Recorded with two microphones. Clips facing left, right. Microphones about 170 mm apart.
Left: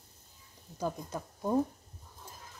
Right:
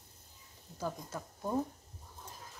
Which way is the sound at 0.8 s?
15° left (ahead or behind).